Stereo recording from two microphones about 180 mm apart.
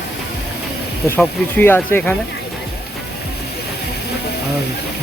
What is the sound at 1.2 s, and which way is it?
Speech, 10° left (ahead or behind).